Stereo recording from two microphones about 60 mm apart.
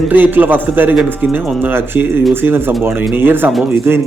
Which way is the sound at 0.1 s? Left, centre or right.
Right.